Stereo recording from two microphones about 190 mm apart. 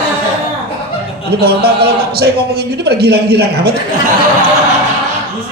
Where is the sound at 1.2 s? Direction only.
55° right (ahead or behind).